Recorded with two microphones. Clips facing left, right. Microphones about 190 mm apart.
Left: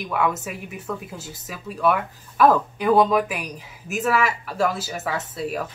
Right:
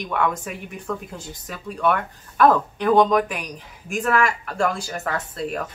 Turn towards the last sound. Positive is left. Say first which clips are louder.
# even
turn(degrees=5)  # may be behind; listen again after turning